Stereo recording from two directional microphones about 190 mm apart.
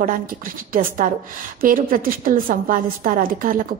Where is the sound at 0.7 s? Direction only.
45° right (ahead or behind).